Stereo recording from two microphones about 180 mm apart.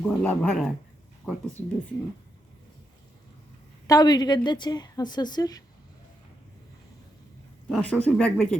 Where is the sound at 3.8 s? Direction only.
20° left (ahead or behind).